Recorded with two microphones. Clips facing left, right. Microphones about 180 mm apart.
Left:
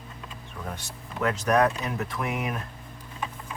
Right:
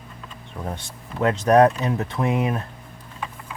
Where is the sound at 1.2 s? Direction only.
30° right (ahead or behind).